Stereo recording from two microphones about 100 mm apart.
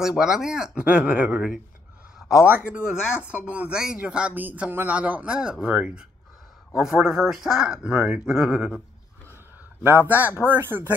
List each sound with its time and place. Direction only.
0.0 s speech: 5° right (ahead or behind)
2.1 s a sound: 5° right (ahead or behind)
2.5 s speech: 10° right (ahead or behind)
9.8 s speech: 20° right (ahead or behind)